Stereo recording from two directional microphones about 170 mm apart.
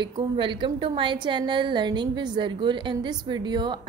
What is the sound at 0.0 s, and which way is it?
A woman's voice, 30° right (ahead or behind).